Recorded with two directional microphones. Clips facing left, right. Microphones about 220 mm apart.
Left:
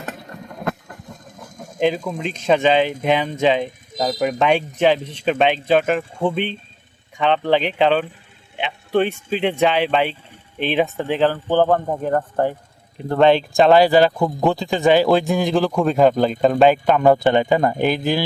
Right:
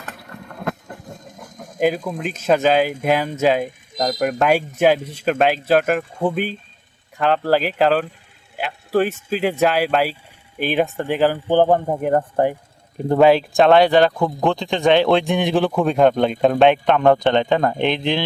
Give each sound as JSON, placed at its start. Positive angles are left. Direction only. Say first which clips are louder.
{"t": 1.4, "sound": "speech", "louder": "even", "side_deg": -5}
{"t": 13.1, "sound": "speech", "louder": "right 1 dB", "side_deg": 0}